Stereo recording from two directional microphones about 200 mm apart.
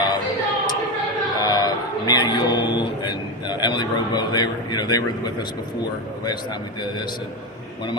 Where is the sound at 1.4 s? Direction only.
20° left (ahead or behind).